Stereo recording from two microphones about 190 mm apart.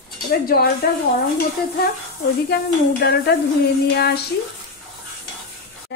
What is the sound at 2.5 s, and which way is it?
Speech, 60° left (ahead or behind).